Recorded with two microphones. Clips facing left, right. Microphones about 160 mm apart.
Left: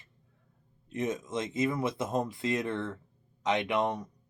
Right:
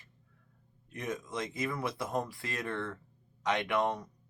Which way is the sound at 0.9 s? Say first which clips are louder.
Left 5 dB; 20° left (ahead or behind).